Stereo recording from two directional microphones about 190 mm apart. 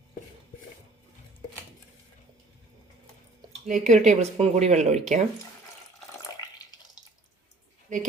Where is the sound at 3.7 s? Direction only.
40° right (ahead or behind).